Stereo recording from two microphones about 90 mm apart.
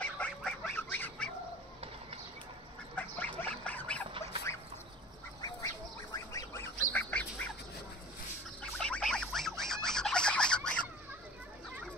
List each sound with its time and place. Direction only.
0.0 s duck: 15° left (ahead or behind)
3.0 s duck: 20° left (ahead or behind)
4.5 s bird: 30° left (ahead or behind)
6.1 s duck: 35° left (ahead or behind)
7.0 s duck: 20° left (ahead or behind)
8.7 s a sound: 10° left (ahead or behind)